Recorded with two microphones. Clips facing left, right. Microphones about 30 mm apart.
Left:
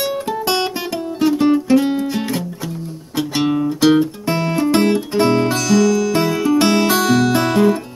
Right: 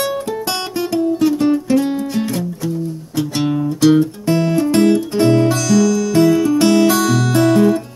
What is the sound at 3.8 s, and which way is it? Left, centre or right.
Music, left.